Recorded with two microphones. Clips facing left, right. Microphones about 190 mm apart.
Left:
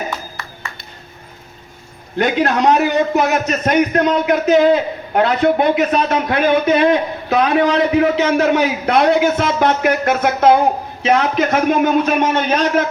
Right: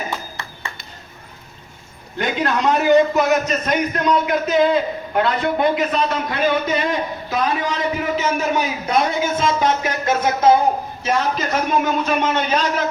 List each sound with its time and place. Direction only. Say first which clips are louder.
2.1 s a man's voice: left 5 dB; 50° left (ahead or behind)